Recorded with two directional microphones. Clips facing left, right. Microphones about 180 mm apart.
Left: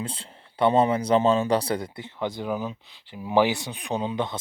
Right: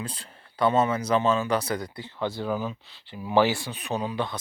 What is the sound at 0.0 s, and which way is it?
Speech, 25° left (ahead or behind).